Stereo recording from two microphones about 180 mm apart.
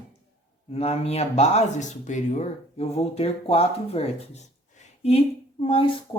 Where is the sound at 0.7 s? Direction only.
35° left (ahead or behind).